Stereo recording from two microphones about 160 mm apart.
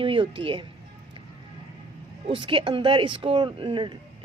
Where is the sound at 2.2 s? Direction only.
35° right (ahead or behind).